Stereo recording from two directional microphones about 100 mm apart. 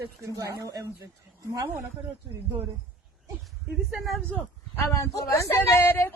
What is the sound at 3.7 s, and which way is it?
Speech, 5° right (ahead or behind).